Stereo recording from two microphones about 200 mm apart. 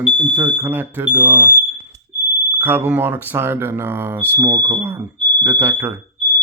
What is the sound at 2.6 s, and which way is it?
Speech, 10° right (ahead or behind).